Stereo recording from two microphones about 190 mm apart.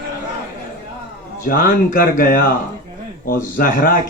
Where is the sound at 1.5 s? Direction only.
50° left (ahead or behind).